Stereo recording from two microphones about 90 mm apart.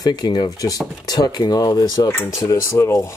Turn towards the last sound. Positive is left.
turn(degrees=30)  # may be behind; listen again after turning